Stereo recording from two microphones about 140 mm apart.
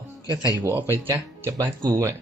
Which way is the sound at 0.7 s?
15° right (ahead or behind).